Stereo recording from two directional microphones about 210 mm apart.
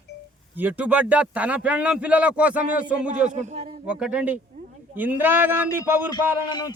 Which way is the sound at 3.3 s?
35° right (ahead or behind).